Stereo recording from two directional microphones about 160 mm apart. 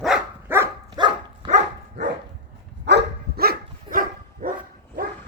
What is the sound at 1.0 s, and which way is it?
Dog, 25° right (ahead or behind).